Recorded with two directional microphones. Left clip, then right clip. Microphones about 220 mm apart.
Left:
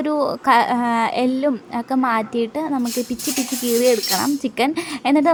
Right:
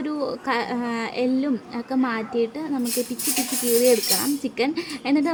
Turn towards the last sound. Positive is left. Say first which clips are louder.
# left 7 dB
turn(degrees=20)  # may be behind; listen again after turning